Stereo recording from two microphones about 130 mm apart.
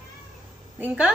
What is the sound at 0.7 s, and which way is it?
Speech, 10° right (ahead or behind).